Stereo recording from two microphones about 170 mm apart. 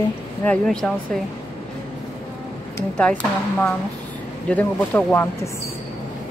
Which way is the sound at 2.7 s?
5° left (ahead or behind).